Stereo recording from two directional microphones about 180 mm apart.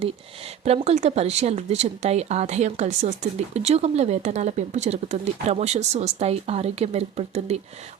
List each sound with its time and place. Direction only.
0.6 s a woman's voice: 35° right (ahead or behind)